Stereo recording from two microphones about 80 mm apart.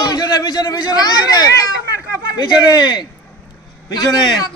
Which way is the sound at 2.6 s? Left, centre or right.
Left.